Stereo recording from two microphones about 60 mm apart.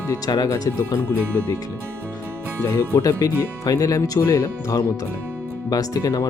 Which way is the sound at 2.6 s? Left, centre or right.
Left.